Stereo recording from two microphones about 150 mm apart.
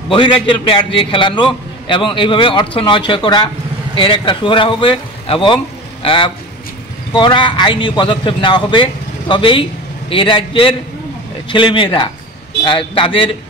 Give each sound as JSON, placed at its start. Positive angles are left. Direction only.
{"t": 0.1, "sound": "a man's voice", "side_deg": 35}